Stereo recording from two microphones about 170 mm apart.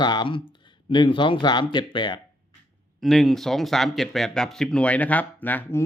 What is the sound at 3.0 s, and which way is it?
Speech, centre (ahead or behind).